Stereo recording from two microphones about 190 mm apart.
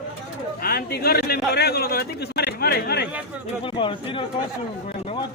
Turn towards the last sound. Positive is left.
turn(degrees=25)  # may be behind; listen again after turning